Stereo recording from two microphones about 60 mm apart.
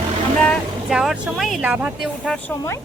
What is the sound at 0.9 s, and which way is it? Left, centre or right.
Speech, centre.